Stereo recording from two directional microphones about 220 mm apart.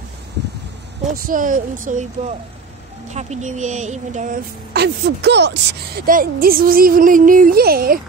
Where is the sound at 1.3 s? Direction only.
40° right (ahead or behind).